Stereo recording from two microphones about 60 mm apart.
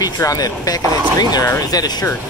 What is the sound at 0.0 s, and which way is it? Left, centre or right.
Speech, left.